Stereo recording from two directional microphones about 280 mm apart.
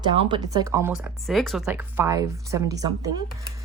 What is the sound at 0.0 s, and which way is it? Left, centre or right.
Speech, centre.